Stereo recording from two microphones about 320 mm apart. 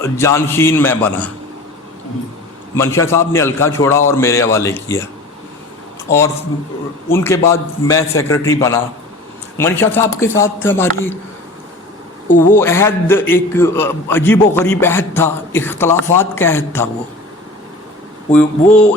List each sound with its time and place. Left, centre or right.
0.0 s a man's voice: centre
2.7 s a man's voice: centre
6.1 s a man's voice: centre
12.5 s a man's voice: centre